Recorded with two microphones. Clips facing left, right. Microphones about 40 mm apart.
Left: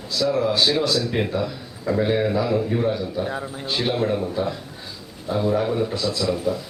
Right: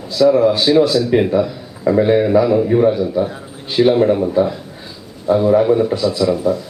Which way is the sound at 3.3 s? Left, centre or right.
Centre.